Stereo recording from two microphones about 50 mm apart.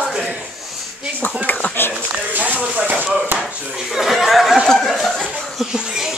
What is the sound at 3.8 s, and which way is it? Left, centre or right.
Speech, centre.